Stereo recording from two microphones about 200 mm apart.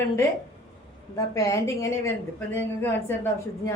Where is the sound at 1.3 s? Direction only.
15° left (ahead or behind).